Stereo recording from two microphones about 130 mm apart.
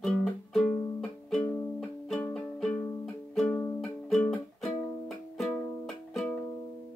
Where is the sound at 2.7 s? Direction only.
15° left (ahead or behind).